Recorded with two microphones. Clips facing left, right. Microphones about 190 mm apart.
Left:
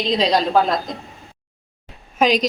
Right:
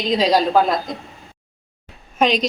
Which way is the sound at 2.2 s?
Centre (ahead or behind).